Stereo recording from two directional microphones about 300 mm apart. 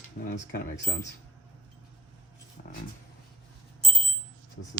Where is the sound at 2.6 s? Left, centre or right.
Left.